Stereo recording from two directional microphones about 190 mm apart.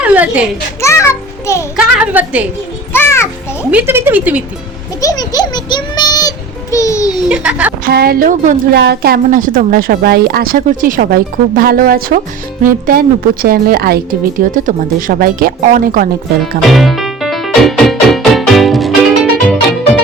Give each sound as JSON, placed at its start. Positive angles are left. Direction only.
{"t": 0.0, "sound": "a sound", "side_deg": -5}
{"t": 0.8, "sound": "a child's voice", "side_deg": 15}
{"t": 1.7, "sound": "speech", "side_deg": -5}
{"t": 2.9, "sound": "music", "side_deg": 15}
{"t": 3.6, "sound": "speech", "side_deg": -10}
{"t": 4.9, "sound": "a sound", "side_deg": 20}
{"t": 7.3, "sound": "speech", "side_deg": -5}
{"t": 7.9, "sound": "a woman's voice", "side_deg": -50}
{"t": 8.7, "sound": "a woman's voice", "side_deg": -60}
{"t": 16.4, "sound": "music", "side_deg": 0}